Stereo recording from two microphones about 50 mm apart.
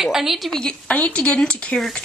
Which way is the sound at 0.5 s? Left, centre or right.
Centre.